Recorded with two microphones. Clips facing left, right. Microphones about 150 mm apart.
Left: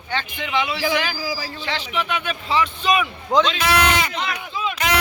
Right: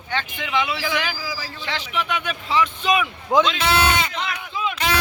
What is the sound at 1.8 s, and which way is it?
Speech, 10° right (ahead or behind).